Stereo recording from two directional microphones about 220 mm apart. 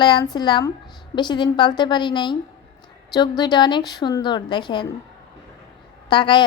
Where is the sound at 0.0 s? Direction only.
20° left (ahead or behind).